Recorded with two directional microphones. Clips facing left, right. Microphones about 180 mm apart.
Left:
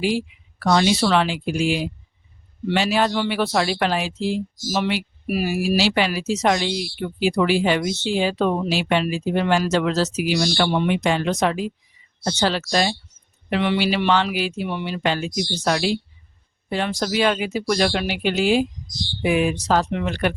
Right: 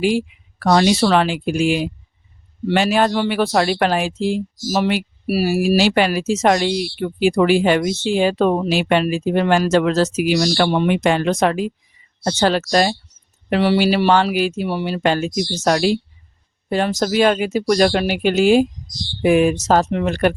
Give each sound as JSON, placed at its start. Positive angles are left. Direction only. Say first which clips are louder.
{"t": 0.0, "sound": "speech", "louder": "right 4 dB", "side_deg": -50}